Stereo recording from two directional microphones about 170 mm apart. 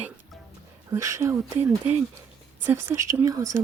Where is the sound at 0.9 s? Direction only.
15° right (ahead or behind).